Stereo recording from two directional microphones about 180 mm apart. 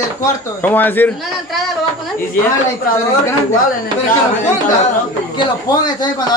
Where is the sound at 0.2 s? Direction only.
10° left (ahead or behind).